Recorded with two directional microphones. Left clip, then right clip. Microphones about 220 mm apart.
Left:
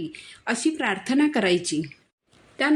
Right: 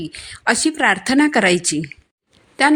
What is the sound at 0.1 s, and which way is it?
A woman's voice, 40° right (ahead or behind).